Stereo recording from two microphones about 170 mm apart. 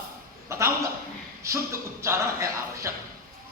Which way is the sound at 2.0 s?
15° right (ahead or behind).